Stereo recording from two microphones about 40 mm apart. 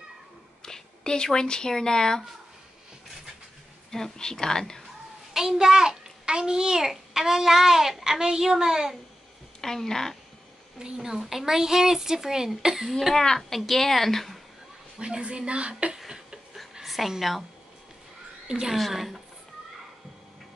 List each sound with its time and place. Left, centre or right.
0.6 s speech: centre
3.9 s a woman's voice: centre
5.3 s a child's voice: centre
9.6 s speech: centre
10.8 s speech: centre
13.1 s a woman's voice: centre
13.4 s a woman's voice: centre
15.0 s a woman's voice: right
16.8 s a sound: centre
17.1 s a woman's voice: centre
18.5 s speech: centre
18.8 s a woman's voice: centre